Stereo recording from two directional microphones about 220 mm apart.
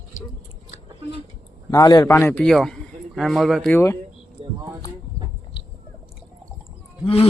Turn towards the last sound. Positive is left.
turn(degrees=25)  # may be behind; listen again after turning